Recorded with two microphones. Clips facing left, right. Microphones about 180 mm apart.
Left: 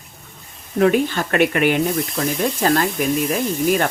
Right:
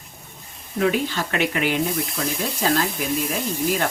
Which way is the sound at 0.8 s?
50° left (ahead or behind).